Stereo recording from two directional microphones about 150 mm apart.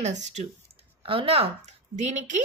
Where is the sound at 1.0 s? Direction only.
35° right (ahead or behind); by 2.4 s 50° right (ahead or behind).